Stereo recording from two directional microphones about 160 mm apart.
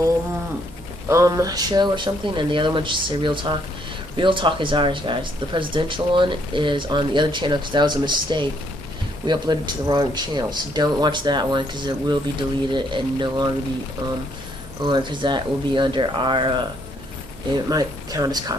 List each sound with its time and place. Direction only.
1.0 s speech: 20° right (ahead or behind)
17.6 s speech: 25° right (ahead or behind)